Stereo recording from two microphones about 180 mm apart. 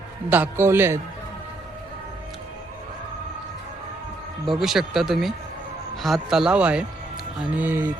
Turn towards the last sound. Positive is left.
turn(degrees=-10)  # may be behind; listen again after turning